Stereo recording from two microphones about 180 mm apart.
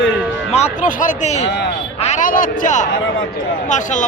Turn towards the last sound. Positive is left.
turn(degrees=45)  # may be behind; listen again after turning